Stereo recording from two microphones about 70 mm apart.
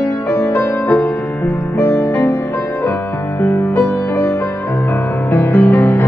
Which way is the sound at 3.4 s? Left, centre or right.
Left.